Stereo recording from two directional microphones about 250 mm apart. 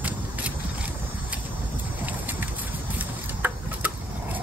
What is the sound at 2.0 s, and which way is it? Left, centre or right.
Clip-clop, centre.